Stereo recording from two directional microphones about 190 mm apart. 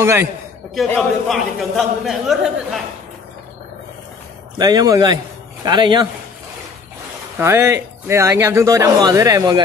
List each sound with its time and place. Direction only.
0.0 s speech: 15° right (ahead or behind)
0.8 s a man's voice: 5° left (ahead or behind)
4.6 s a man's voice: 20° right (ahead or behind)
7.3 s speech: 15° right (ahead or behind)